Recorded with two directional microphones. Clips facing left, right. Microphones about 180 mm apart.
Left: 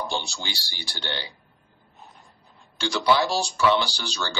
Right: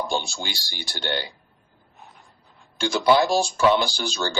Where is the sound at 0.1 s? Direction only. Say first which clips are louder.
Right 3 dB; 50° right (ahead or behind).